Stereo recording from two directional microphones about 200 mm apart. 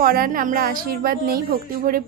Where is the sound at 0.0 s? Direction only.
45° right (ahead or behind).